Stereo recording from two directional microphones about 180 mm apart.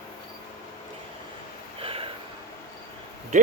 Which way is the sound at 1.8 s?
30° right (ahead or behind).